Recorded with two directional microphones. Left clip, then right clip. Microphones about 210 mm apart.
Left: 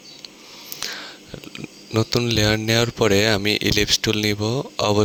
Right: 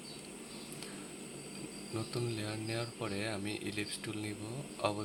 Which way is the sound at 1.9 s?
50° left (ahead or behind).